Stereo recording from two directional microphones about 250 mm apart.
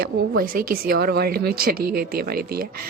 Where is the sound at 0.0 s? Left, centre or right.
Right.